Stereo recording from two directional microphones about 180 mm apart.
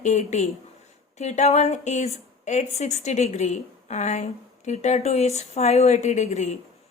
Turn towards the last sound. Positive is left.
turn(degrees=40)  # may be behind; listen again after turning